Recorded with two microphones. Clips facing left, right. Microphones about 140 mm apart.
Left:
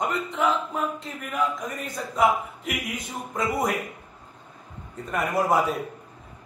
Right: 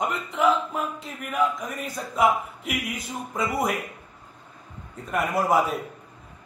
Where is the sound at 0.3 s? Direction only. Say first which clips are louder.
Right 6 dB; centre (ahead or behind).